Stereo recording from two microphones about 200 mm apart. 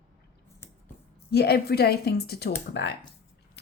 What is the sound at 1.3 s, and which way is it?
Speech, 55° left (ahead or behind).